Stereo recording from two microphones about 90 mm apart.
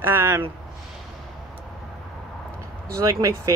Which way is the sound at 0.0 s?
25° right (ahead or behind).